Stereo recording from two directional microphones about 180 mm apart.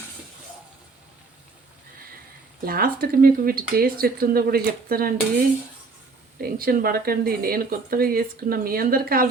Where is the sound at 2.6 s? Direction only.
55° right (ahead or behind).